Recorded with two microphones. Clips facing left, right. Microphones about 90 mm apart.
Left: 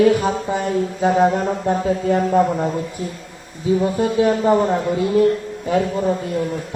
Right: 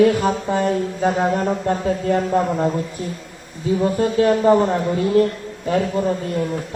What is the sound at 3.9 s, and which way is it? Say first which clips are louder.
A man's voice: even; 15° left (ahead or behind).